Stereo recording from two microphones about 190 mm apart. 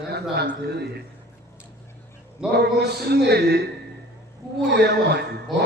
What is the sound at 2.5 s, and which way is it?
A man's voice, 60° right (ahead or behind).